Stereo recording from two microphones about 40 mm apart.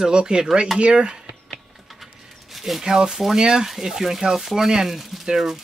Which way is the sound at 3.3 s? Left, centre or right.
Centre.